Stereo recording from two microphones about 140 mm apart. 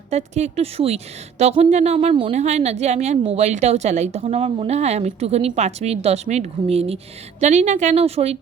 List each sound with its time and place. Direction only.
0.1 s a woman's voice: 55° right (ahead or behind)
2.3 s a woman's voice: 55° right (ahead or behind)